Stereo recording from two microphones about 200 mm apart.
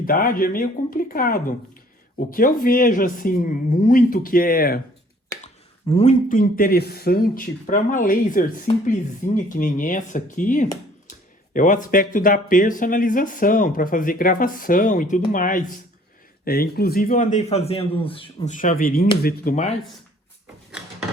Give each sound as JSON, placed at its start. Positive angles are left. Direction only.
{"t": 0.0, "sound": "speech", "side_deg": 45}
{"t": 5.3, "sound": "a sound", "side_deg": 15}
{"t": 5.9, "sound": "speech", "side_deg": 35}
{"t": 18.5, "sound": "speech", "side_deg": 40}